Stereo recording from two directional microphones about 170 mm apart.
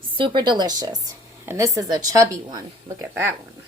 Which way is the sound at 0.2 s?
25° right (ahead or behind).